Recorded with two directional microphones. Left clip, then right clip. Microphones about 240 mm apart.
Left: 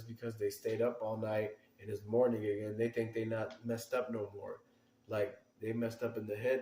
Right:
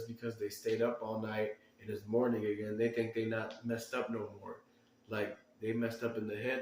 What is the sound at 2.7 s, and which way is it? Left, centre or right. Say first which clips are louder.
Speech: right 2 dB; left.